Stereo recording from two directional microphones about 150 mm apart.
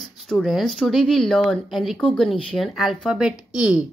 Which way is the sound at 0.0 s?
Centre (ahead or behind).